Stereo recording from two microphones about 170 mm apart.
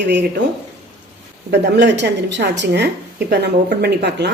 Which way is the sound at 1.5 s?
90° right.